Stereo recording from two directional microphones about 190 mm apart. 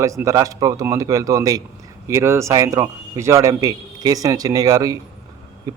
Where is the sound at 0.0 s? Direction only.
15° right (ahead or behind).